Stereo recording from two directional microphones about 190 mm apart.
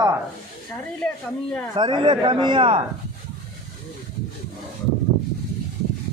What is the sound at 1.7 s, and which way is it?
A man's voice, 25° right (ahead or behind).